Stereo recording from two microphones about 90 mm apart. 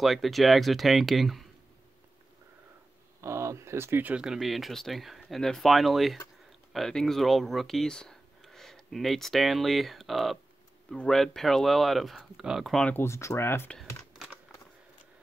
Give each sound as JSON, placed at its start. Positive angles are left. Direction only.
{"t": 0.0, "sound": "speech", "side_deg": 0}
{"t": 3.2, "sound": "a sound", "side_deg": -30}
{"t": 4.1, "sound": "speech", "side_deg": -5}
{"t": 12.8, "sound": "speech", "side_deg": 25}